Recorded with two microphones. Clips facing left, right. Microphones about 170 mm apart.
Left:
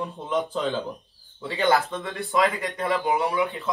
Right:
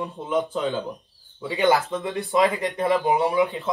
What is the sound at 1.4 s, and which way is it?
Speech, 15° right (ahead or behind).